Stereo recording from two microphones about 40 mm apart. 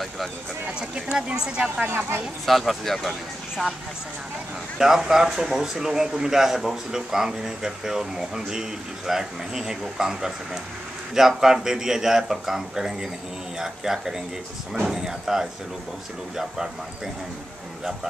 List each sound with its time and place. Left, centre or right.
0.7 s speech: right
2.4 s speech: centre
4.7 s speech: centre